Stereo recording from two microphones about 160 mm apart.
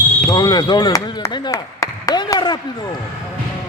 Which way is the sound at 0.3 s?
25° left (ahead or behind).